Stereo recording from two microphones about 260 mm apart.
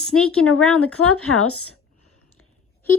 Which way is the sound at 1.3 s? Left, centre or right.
Left.